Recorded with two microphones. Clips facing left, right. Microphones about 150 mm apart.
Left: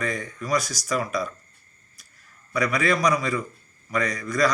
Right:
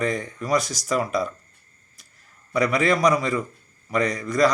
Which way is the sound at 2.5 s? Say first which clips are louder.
Right 3 dB; 30° right (ahead or behind).